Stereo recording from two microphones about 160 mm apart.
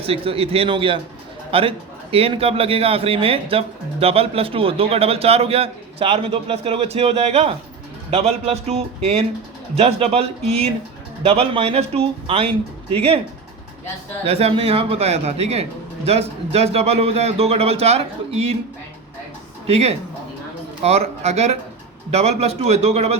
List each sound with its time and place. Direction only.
0.0 s a man's voice: 35° right (ahead or behind)
14.3 s a man's voice: 40° right (ahead or behind)
19.6 s a man's voice: 40° right (ahead or behind)